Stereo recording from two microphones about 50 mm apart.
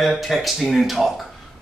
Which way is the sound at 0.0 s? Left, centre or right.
Centre.